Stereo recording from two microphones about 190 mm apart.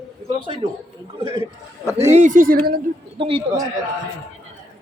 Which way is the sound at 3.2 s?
30° right (ahead or behind).